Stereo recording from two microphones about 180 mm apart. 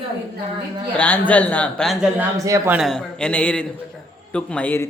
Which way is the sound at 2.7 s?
Centre (ahead or behind).